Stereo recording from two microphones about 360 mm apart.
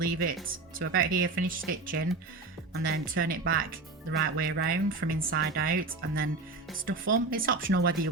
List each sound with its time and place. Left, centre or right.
0.0 s speech: right